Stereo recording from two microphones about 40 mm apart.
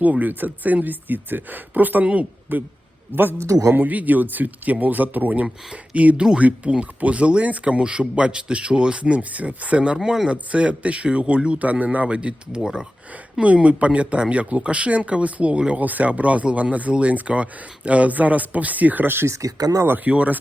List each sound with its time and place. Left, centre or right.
0.0 s speech: right
2.5 s a man's voice: right
3.8 s speech: right
6.1 s speech: right
10.0 s speech: centre
10.2 s speech: right
11.6 s speech: right
12.0 s speech: right
13.4 s speech: right
15.8 s speech: right
19.0 s speech: right
20.1 s speech: right